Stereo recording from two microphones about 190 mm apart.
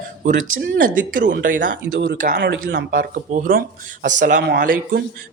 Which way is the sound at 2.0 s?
60° right (ahead or behind).